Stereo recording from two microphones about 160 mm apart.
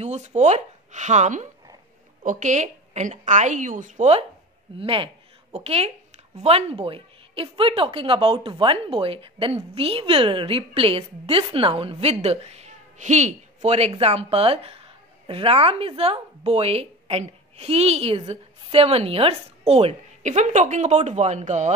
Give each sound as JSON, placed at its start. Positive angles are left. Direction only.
{"t": 0.0, "sound": "a woman's voice", "side_deg": -45}